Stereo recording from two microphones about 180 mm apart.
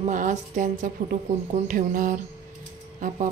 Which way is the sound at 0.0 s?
45° right (ahead or behind).